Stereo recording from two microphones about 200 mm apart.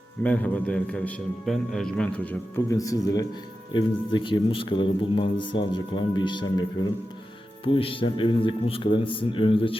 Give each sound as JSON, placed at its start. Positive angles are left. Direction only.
{"t": 0.2, "sound": "a man's voice", "side_deg": 5}